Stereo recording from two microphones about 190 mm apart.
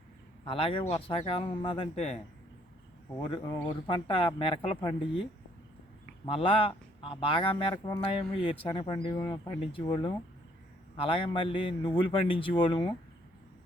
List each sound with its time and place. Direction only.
0.4 s speech: 30° left (ahead or behind)
6.2 s speech: 30° left (ahead or behind)